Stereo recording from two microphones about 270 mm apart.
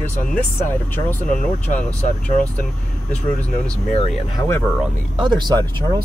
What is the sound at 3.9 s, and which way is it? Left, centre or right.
Speech, centre.